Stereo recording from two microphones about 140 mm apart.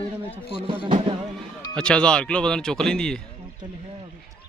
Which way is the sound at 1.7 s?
5° left (ahead or behind).